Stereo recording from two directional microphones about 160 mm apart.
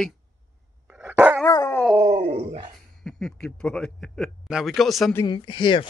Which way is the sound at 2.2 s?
40° right (ahead or behind).